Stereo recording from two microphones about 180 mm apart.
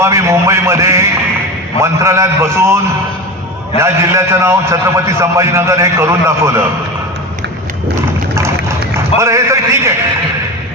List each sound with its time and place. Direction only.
0.0 s a man's voice: 15° right (ahead or behind)
3.8 s a man's voice: 15° right (ahead or behind)
9.2 s a man's voice: 15° right (ahead or behind)